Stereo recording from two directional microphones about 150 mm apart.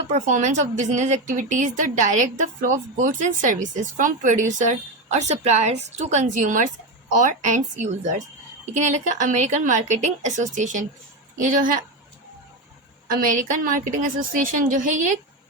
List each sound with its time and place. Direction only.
0.1 s a woman's voice: 55° right (ahead or behind)
13.1 s a woman's voice: 70° right (ahead or behind)